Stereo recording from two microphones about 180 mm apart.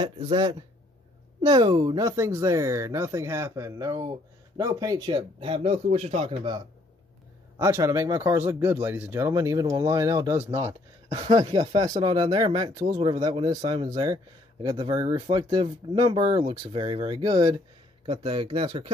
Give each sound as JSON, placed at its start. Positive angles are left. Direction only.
{"t": 0.0, "sound": "speech", "side_deg": -30}
{"t": 7.5, "sound": "speech", "side_deg": -15}
{"t": 11.1, "sound": "speech", "side_deg": -30}